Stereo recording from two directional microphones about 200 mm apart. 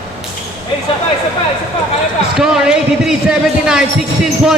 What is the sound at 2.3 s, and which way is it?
A man's voice, 5° right (ahead or behind).